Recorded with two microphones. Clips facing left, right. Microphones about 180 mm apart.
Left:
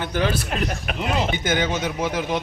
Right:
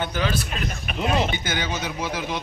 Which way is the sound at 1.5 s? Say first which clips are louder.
Left 5 dB; 45° left (ahead or behind).